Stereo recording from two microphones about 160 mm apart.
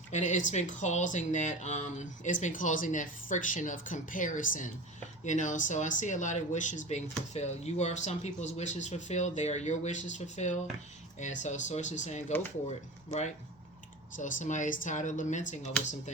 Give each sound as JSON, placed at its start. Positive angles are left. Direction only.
{"t": 0.1, "sound": "speech", "side_deg": 50}